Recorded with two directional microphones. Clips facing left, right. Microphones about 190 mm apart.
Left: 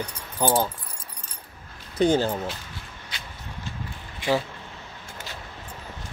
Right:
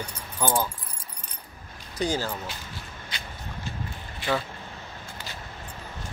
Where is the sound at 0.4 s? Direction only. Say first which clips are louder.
Left 4 dB; 15° left (ahead or behind).